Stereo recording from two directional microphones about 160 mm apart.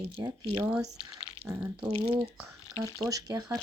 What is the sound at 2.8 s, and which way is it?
Speech, 20° right (ahead or behind).